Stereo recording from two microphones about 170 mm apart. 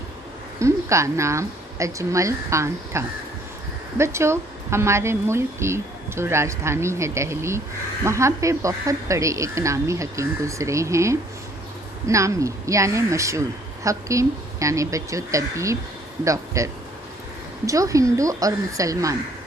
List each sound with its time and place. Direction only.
0.6 s a woman's voice: 15° right (ahead or behind)
17.7 s a woman's voice: 20° right (ahead or behind)